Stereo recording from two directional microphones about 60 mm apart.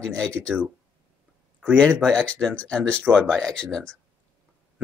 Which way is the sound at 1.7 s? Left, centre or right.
Centre.